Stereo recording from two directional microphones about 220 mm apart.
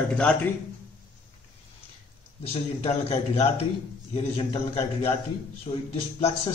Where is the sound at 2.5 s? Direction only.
25° left (ahead or behind).